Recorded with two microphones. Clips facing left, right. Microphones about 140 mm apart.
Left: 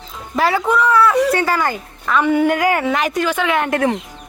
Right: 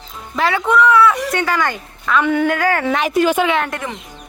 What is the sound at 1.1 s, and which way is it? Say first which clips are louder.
Speech: left 5 dB; 30° left (ahead or behind).